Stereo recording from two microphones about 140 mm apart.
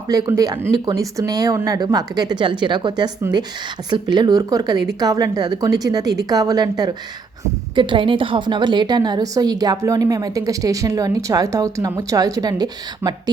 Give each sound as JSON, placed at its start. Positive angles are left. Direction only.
{"t": 0.1, "sound": "a woman's voice", "side_deg": -25}